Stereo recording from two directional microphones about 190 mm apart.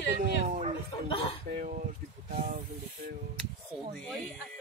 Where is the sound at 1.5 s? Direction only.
45° right (ahead or behind).